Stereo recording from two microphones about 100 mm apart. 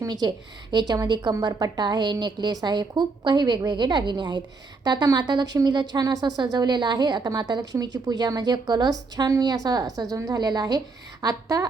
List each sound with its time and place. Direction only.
0.1 s a woman's voice: 45° right (ahead or behind)